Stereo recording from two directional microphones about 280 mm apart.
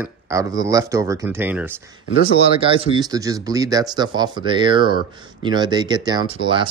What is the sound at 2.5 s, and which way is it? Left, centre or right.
Speech, centre.